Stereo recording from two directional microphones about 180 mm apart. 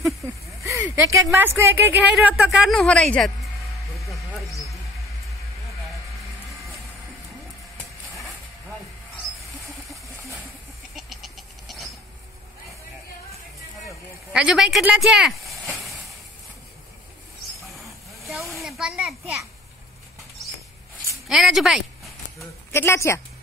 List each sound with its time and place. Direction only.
0.7 s speech: 15° right (ahead or behind); by 3.3 s 5° left (ahead or behind)
4.0 s a sound: centre (ahead or behind)
11.0 s goat: centre (ahead or behind)
14.3 s speech: 5° right (ahead or behind)
17.8 s vehicle: centre (ahead or behind)
18.6 s a sound: centre (ahead or behind)
21.3 s speech: centre (ahead or behind)
22.8 s a woman's voice: 15° left (ahead or behind)